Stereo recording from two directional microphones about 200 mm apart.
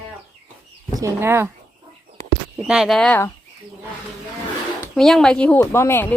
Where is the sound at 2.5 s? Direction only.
5° right (ahead or behind).